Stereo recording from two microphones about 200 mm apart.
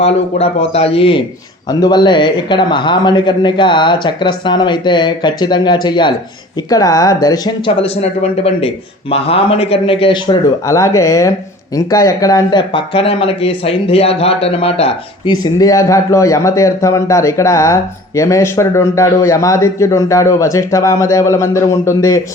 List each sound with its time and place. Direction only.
0.0 s a man's voice: 30° left (ahead or behind); by 22.2 s 15° left (ahead or behind)